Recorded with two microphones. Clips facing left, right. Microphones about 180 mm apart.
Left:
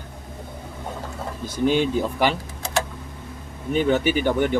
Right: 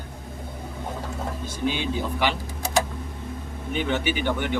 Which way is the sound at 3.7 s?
45° left (ahead or behind).